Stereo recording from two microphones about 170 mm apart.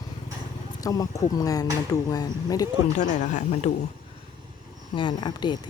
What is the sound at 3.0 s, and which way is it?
Speech, 45° left (ahead or behind).